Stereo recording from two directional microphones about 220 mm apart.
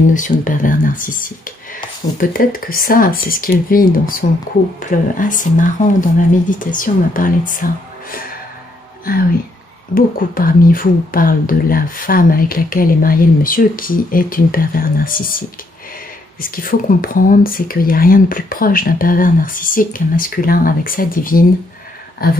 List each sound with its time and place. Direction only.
0.1 s speech: 35° left (ahead or behind)
9.9 s speech: 40° left (ahead or behind)